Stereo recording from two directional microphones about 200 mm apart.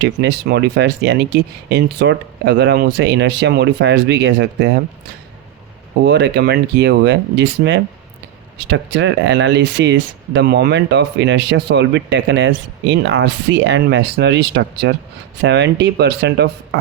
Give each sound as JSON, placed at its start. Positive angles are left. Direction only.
{"t": 0.0, "sound": "speech", "side_deg": -60}
{"t": 6.1, "sound": "speech", "side_deg": -60}